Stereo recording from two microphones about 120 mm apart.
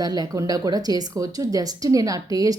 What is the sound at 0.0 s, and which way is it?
Speech, 30° right (ahead or behind).